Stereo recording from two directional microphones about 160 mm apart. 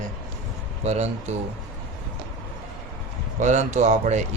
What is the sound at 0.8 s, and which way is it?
Speech, 45° right (ahead or behind).